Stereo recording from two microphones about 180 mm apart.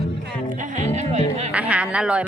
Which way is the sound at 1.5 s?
5° right (ahead or behind).